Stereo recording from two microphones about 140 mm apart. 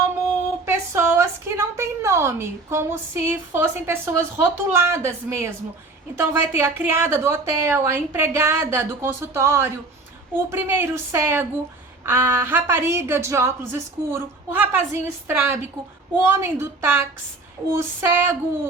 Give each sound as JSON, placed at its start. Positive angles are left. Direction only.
{"t": 0.6, "sound": "a woman's voice", "side_deg": -15}